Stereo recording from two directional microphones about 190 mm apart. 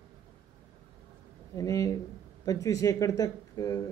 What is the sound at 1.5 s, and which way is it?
Speech, 15° left (ahead or behind).